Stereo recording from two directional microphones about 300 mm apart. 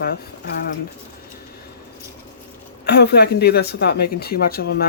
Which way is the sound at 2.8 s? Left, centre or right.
Left.